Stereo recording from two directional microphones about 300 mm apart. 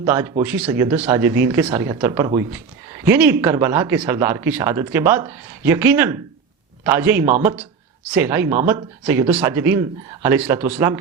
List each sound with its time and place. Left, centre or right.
0.0 s speech: centre
7.3 s speech: right
8.1 s speech: centre